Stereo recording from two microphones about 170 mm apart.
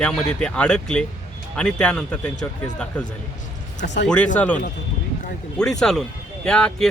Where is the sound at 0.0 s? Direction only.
5° left (ahead or behind).